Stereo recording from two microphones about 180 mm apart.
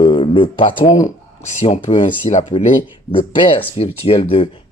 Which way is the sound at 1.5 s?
40° left (ahead or behind).